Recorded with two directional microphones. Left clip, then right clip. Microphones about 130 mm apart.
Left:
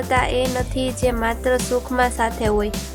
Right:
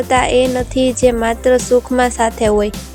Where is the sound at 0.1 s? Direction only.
25° right (ahead or behind).